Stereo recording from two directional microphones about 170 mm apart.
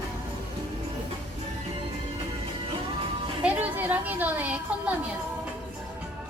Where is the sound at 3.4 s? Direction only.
10° right (ahead or behind).